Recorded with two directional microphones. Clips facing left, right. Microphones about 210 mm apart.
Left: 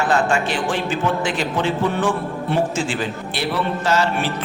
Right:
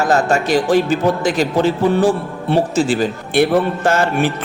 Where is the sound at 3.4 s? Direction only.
50° right (ahead or behind).